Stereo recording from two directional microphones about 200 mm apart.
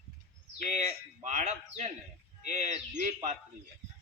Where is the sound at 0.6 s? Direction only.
35° right (ahead or behind).